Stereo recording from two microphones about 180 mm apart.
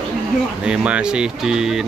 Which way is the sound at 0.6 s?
5° right (ahead or behind).